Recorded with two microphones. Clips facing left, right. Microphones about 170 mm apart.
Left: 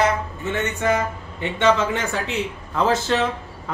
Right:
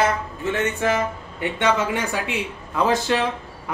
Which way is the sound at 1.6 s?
15° right (ahead or behind).